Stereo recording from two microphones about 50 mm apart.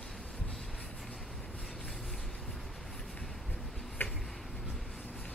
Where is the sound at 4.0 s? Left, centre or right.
Left.